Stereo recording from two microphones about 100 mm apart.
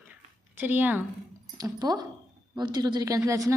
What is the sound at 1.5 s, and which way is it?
A woman's voice, 40° right (ahead or behind).